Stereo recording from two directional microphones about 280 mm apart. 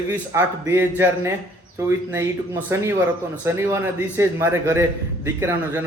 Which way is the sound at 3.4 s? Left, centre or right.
Centre.